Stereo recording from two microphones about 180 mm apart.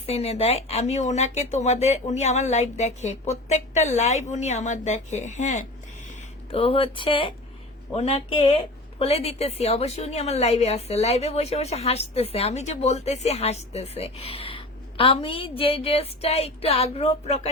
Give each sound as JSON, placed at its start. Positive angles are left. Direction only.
{"t": 0.0, "sound": "a woman's voice", "side_deg": 35}
{"t": 6.5, "sound": "a woman's voice", "side_deg": 30}